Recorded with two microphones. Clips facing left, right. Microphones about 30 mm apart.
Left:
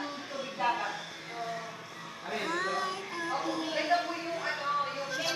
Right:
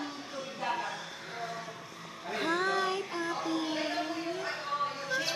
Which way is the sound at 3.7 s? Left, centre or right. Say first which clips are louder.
Left 3 dB; centre.